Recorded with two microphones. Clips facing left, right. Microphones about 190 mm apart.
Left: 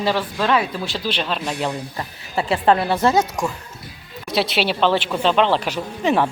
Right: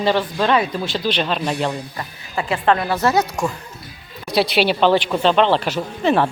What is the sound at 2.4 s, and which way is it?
Speech, 30° left (ahead or behind).